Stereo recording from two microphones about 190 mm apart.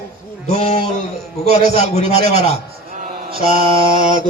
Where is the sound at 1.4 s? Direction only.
50° right (ahead or behind).